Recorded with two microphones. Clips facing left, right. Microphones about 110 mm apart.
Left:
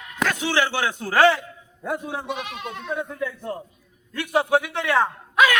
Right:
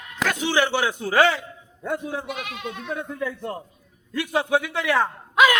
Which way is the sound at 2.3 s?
25° left (ahead or behind).